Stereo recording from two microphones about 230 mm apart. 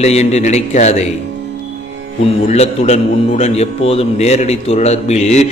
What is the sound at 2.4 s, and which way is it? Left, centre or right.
A man's voice, left.